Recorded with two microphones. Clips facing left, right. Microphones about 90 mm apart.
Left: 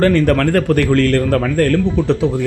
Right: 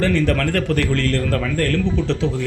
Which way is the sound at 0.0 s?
50° left (ahead or behind).